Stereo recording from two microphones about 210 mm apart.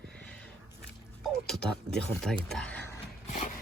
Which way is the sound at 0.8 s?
Centre (ahead or behind).